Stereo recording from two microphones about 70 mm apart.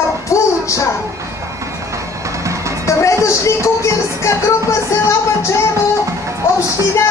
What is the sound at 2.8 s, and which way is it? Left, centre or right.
Music, left.